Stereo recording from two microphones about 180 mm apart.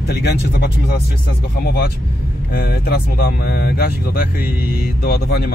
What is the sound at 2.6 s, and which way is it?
Speech, 60° left (ahead or behind).